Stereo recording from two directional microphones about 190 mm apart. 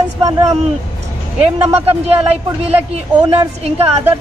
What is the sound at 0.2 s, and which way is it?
Speech, 20° right (ahead or behind).